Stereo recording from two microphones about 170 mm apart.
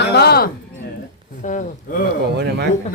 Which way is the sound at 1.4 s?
45° left (ahead or behind).